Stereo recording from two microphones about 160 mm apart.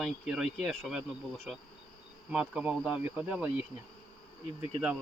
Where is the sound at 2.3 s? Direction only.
5° right (ahead or behind).